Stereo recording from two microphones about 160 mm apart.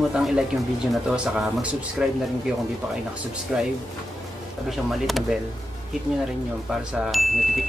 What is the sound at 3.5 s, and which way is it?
Speech, 5° right (ahead or behind).